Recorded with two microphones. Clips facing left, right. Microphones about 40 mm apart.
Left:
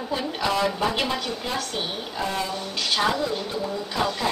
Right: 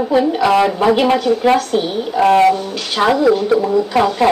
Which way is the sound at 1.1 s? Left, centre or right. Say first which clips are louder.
Right 15 dB; right.